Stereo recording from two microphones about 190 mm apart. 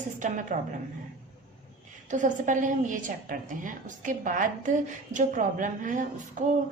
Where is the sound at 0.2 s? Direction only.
40° right (ahead or behind).